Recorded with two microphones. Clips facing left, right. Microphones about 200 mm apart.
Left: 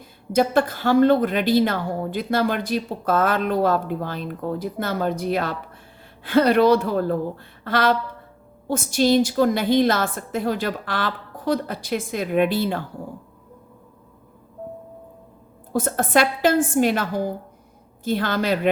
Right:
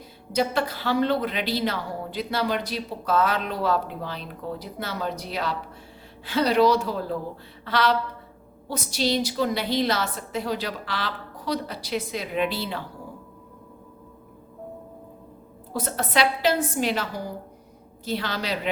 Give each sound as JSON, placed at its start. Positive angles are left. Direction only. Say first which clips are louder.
{"t": 0.3, "sound": "a woman's voice", "louder": "left 5 dB", "side_deg": 50}
{"t": 15.7, "sound": "a woman's voice", "louder": "left 6 dB", "side_deg": 50}